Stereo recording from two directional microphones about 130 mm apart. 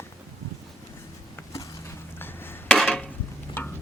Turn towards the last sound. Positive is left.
turn(degrees=15)  # may be behind; listen again after turning